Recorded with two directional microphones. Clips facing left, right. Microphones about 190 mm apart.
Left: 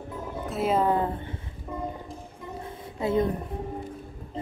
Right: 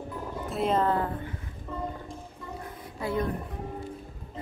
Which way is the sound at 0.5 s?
5° left (ahead or behind).